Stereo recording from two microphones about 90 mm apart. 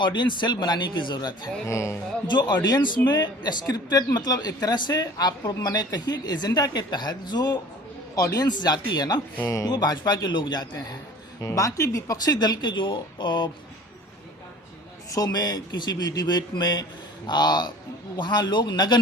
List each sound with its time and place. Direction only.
0.0 s a man's voice: 60° left (ahead or behind)
1.6 s speech: 35° left (ahead or behind)
2.2 s a man's voice: 55° left (ahead or behind)
11.3 s a man's voice: 35° left (ahead or behind); by 13.5 s 60° left (ahead or behind)
15.1 s a man's voice: 45° left (ahead or behind)